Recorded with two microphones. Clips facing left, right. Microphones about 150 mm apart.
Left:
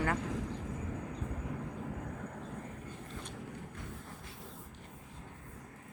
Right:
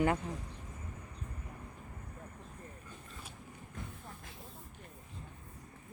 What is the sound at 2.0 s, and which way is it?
Vehicle, 90° left.